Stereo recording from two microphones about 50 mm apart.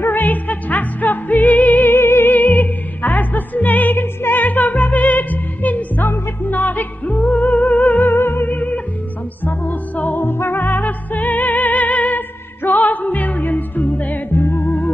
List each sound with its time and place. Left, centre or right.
0.0 s music: left
1.9 s music: left
2.3 s music: left
8.1 s music: left
14.3 s music: left